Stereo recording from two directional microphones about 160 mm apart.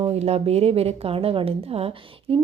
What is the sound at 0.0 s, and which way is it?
A woman's voice, 40° right (ahead or behind).